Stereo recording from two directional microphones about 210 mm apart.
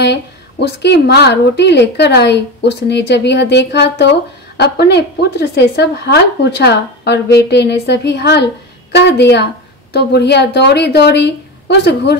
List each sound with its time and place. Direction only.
0.0 s a woman's voice: 55° left (ahead or behind)